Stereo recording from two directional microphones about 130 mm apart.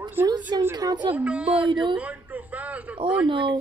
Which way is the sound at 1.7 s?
35° right (ahead or behind).